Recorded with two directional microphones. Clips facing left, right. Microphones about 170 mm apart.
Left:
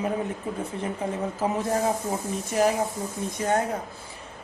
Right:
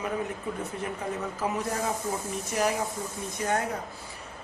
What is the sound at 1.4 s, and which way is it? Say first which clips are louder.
Speech: left 4 dB; 30° left (ahead or behind).